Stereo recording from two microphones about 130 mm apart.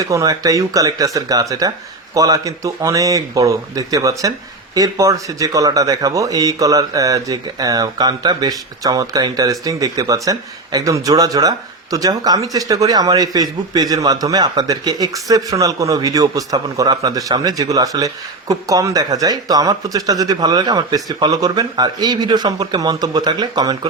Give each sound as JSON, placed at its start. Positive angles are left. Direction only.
{"t": 0.0, "sound": "speech", "side_deg": -25}